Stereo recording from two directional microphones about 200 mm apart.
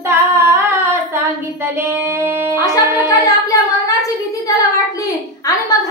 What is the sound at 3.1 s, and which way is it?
Singing, 15° left (ahead or behind).